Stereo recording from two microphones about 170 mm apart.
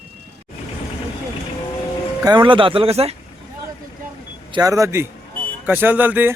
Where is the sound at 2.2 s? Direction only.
25° right (ahead or behind).